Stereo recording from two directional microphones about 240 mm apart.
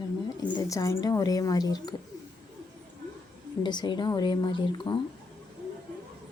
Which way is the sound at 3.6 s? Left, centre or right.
Centre.